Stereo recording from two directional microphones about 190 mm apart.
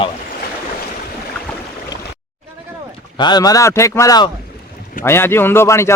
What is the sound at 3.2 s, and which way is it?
A man's voice, 20° left (ahead or behind).